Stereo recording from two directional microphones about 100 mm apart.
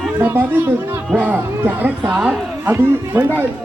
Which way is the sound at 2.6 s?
25° right (ahead or behind).